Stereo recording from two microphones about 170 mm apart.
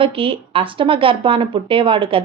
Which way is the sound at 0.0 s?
30° right (ahead or behind).